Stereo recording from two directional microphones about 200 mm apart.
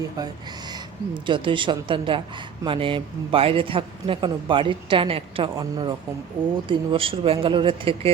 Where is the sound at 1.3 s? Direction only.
25° right (ahead or behind).